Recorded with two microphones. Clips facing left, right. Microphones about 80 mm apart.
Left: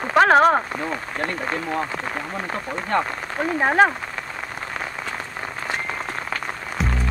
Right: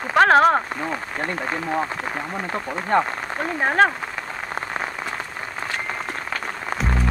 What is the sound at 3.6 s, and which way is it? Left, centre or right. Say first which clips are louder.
Speech: left 1 dB; centre.